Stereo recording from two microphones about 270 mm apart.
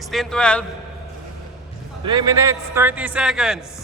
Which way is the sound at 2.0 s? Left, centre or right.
Centre.